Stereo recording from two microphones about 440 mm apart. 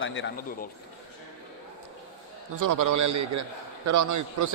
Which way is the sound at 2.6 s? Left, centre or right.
Right.